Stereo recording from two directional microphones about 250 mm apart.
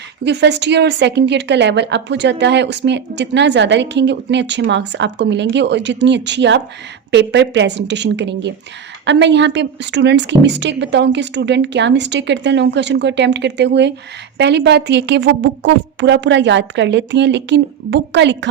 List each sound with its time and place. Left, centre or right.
0.3 s a woman's voice: right